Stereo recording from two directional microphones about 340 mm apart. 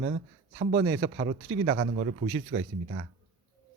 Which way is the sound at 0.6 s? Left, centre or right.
Right.